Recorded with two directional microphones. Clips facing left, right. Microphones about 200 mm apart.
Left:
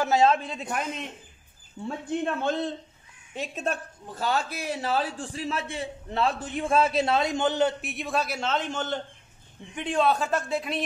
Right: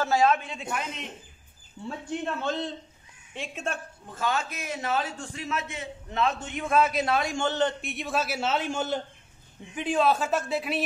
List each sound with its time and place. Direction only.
0.0 s speech: 20° left (ahead or behind); by 0.8 s 40° left (ahead or behind)
2.2 s a man's voice: 55° left (ahead or behind)
3.3 s a man's voice: 35° left (ahead or behind); by 10.8 s 5° right (ahead or behind)